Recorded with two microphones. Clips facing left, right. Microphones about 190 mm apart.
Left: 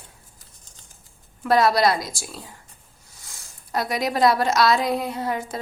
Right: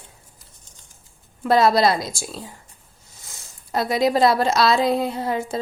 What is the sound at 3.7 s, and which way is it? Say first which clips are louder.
A woman's voice: right 5 dB; 25° right (ahead or behind).